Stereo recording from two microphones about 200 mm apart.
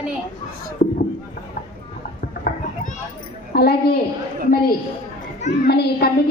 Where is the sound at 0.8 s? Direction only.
45° left (ahead or behind).